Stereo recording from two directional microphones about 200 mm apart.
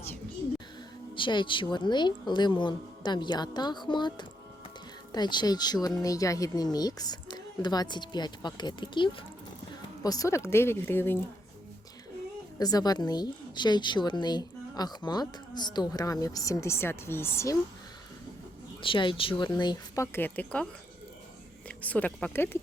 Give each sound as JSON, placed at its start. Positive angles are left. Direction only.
{"t": 1.1, "sound": "a woman's voice", "side_deg": 25}
{"t": 12.5, "sound": "a woman's voice", "side_deg": 20}
{"t": 18.8, "sound": "a woman's voice", "side_deg": 25}
{"t": 21.7, "sound": "speech", "side_deg": 5}